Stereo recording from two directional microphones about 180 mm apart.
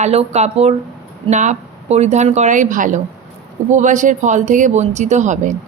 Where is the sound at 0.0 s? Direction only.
35° right (ahead or behind).